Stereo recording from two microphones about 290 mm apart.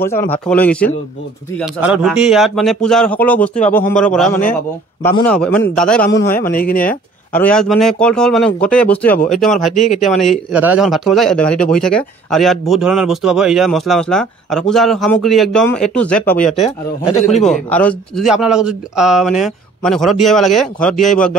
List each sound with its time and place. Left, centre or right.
0.3 s a man's voice: centre
6.5 s speech: left
6.8 s a man's voice: centre